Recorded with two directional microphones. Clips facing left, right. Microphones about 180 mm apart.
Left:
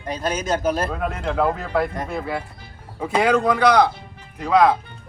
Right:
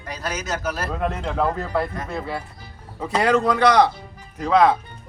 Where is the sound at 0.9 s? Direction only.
Centre (ahead or behind).